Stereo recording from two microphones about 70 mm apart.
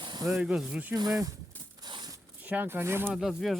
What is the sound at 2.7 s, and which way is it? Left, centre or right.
Speech, right.